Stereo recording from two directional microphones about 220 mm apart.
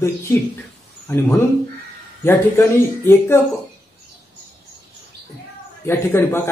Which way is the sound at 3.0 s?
10° left (ahead or behind).